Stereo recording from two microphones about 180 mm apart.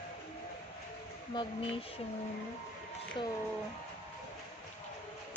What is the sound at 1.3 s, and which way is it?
Speech, 30° left (ahead or behind).